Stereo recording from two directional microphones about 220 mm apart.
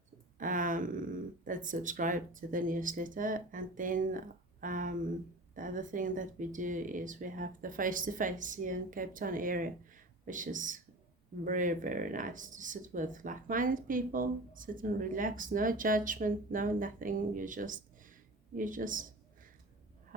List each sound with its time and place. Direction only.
0.3 s speech: 35° right (ahead or behind)